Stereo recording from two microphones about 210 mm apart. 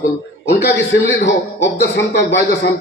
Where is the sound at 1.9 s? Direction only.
55° left (ahead or behind).